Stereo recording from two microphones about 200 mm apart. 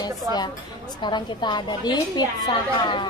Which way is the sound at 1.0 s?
20° left (ahead or behind).